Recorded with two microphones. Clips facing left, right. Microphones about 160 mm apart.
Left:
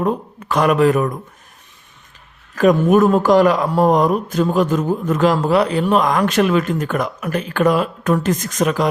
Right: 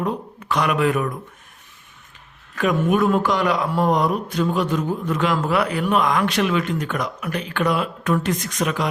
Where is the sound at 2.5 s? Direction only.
40° left (ahead or behind).